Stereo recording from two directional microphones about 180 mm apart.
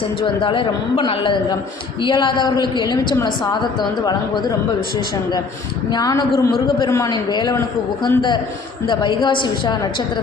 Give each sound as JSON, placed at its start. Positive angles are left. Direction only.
{"t": 0.2, "sound": "a man's voice", "side_deg": 30}
{"t": 5.9, "sound": "a man's voice", "side_deg": 20}